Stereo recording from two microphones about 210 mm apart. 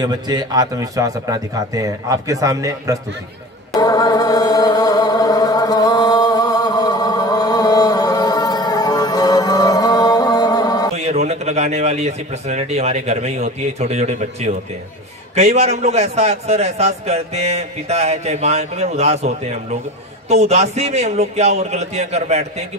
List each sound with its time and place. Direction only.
0.0 s a man's voice: 20° right (ahead or behind)
3.7 s chant: 20° left (ahead or behind)
11.1 s a man's voice: 30° right (ahead or behind)